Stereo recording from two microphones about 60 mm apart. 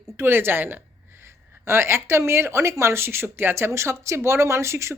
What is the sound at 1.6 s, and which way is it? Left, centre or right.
A woman's voice, right.